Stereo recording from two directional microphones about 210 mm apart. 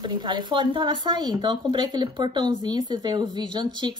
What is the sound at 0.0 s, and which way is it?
Speech, 20° right (ahead or behind).